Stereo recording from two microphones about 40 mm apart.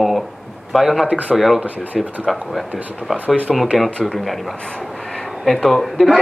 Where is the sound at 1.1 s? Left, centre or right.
Right.